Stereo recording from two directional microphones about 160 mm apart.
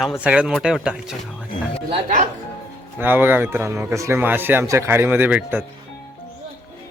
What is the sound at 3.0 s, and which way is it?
Speech, 10° right (ahead or behind).